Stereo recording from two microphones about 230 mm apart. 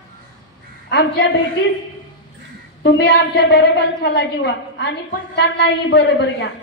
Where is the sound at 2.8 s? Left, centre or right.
Left.